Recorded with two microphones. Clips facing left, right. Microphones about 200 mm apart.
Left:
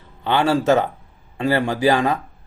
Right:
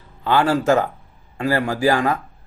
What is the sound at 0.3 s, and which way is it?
Speech, 20° left (ahead or behind).